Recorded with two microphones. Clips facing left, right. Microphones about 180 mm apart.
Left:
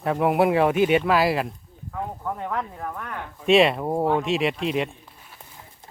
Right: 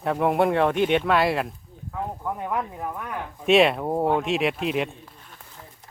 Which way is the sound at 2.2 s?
10° right (ahead or behind).